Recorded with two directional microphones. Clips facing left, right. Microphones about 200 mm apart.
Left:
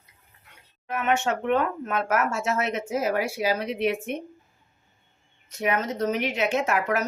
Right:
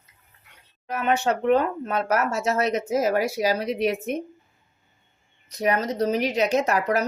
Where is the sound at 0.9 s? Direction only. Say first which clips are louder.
Right 2 dB; 35° right (ahead or behind).